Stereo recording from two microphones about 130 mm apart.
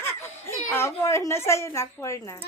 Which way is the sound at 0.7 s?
20° left (ahead or behind).